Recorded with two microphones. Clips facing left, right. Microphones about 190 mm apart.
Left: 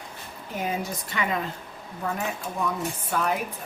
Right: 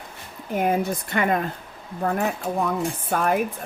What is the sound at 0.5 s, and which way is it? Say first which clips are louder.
Speech: right 7 dB; 55° right (ahead or behind).